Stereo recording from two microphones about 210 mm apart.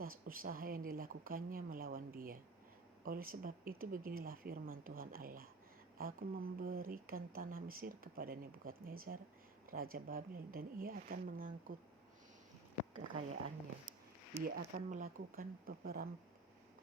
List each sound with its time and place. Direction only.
0.0 s speech: 45° right (ahead or behind)
14.4 s speech: 40° right (ahead or behind)